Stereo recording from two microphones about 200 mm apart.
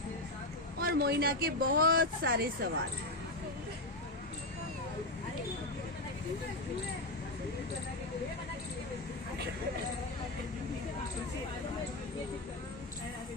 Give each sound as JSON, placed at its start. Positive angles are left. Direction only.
{"t": 0.7, "sound": "speech", "side_deg": -50}